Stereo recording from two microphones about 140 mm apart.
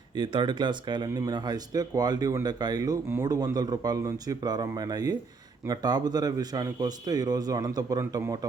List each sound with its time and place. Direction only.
0.2 s speech: 30° right (ahead or behind)